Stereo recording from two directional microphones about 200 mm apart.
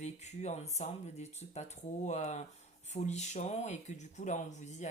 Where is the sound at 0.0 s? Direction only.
35° left (ahead or behind).